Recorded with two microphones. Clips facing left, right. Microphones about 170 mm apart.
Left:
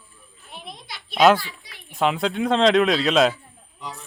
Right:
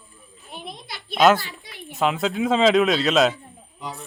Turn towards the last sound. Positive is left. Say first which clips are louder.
# right 2 dB
turn(degrees=0)  # may be behind; listen again after turning